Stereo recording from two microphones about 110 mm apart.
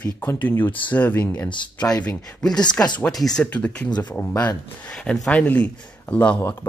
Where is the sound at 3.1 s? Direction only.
5° left (ahead or behind).